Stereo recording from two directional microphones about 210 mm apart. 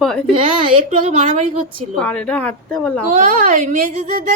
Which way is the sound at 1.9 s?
5° left (ahead or behind).